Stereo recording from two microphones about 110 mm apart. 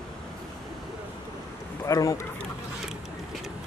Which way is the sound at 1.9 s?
30° left (ahead or behind).